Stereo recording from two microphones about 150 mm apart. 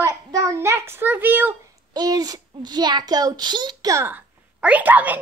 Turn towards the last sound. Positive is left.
turn(degrees=-10)  # may be behind; listen again after turning